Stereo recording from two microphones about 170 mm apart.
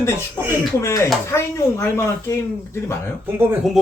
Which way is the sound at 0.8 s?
15° left (ahead or behind).